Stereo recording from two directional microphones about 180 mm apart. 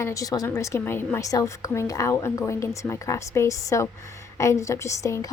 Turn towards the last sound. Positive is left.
turn(degrees=15)  # may be behind; listen again after turning